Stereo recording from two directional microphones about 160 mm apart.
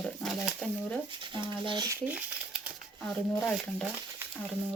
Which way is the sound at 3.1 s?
5° left (ahead or behind).